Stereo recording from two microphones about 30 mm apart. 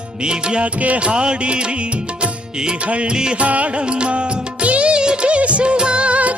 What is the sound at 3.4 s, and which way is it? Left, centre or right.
Music, right.